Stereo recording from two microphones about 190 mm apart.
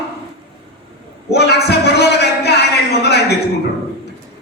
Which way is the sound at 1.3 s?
60° left (ahead or behind).